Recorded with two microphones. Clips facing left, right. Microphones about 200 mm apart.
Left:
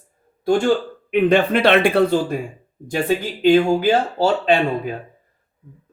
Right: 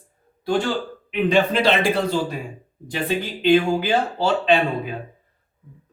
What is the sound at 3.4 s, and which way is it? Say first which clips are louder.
Speech: left 3 dB; 45° left (ahead or behind).